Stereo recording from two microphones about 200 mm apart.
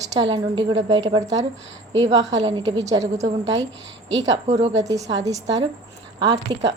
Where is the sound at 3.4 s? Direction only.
65° right (ahead or behind).